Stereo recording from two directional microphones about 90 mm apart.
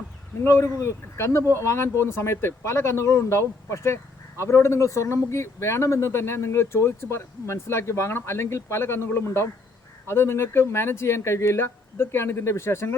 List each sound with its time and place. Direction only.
0.4 s speech: 30° left (ahead or behind)